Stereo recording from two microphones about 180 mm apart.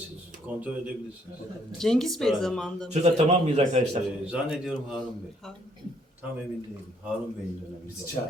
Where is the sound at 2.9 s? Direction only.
35° right (ahead or behind).